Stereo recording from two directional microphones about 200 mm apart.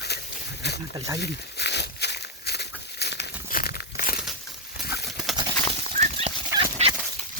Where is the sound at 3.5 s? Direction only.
50° left (ahead or behind).